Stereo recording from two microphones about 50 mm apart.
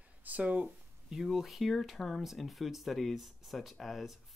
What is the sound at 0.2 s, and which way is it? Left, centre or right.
Speech, right.